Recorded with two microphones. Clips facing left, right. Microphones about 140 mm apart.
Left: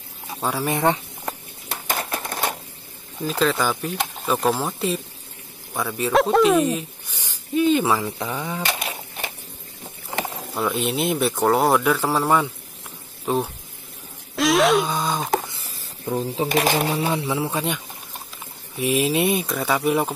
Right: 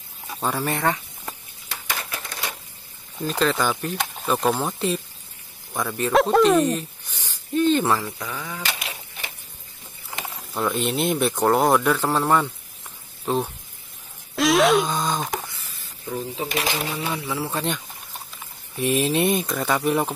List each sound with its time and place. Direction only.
0.3 s speech: 10° left (ahead or behind)
1.9 s typewriter: 50° left (ahead or behind)
3.2 s speech: centre (ahead or behind)
8.0 s speech: 25° left (ahead or behind)
8.7 s a sound: 45° left (ahead or behind)
10.5 s speech: 5° left (ahead or behind)
14.3 s a sound: centre (ahead or behind)
15.4 s a sound: 30° left (ahead or behind); by 16.9 s 45° left (ahead or behind)
16.9 s speech: 30° left (ahead or behind)
17.5 s speech: 5° left (ahead or behind)